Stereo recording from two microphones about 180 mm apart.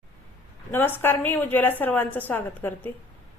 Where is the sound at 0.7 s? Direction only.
10° left (ahead or behind).